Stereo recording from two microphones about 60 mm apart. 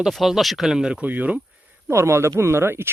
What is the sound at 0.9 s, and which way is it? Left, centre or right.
Speech, right.